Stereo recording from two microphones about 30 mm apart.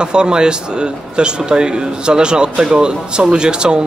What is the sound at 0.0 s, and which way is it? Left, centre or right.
Speech, right.